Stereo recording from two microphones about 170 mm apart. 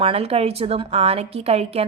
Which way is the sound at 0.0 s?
35° right (ahead or behind).